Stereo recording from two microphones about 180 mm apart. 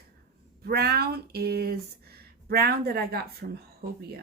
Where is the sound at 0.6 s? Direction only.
60° right (ahead or behind).